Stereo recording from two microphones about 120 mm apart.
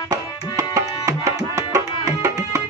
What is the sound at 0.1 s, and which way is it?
Tabla, 30° right (ahead or behind).